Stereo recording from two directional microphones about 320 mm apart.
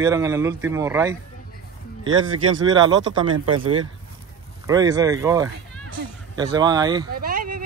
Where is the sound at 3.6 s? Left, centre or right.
Right.